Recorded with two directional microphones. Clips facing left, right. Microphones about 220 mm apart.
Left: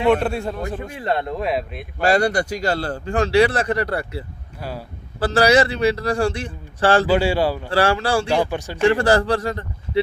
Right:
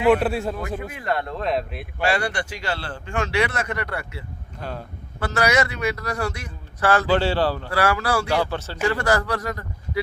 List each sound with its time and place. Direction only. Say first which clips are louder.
0.1 s a man's voice: right 1 dB; centre (ahead or behind)
0.9 s speech: left 5 dB; 25° left (ahead or behind); by 1.9 s centre (ahead or behind)
2.0 s a man's voice: left 6 dB; 40° left (ahead or behind)
4.6 s speech: left 2 dB; 5° left (ahead or behind)
5.2 s a man's voice: left 6 dB; 30° left (ahead or behind)
7.1 s speech: left 2 dB; 10° left (ahead or behind)
7.7 s a man's voice: left 3 dB; 30° left (ahead or behind)
8.3 s speech: left 3 dB; 15° left (ahead or behind)
8.8 s a man's voice: left 6 dB; 30° left (ahead or behind)